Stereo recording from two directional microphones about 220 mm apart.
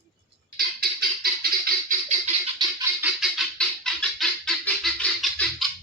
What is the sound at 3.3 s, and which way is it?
Fowl, centre (ahead or behind).